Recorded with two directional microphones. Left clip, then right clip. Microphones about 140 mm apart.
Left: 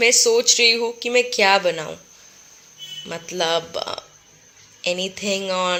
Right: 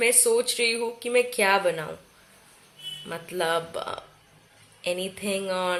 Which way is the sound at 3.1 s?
25° left (ahead or behind).